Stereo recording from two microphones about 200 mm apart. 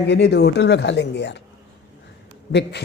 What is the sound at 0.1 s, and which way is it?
A man's voice, 60° left (ahead or behind).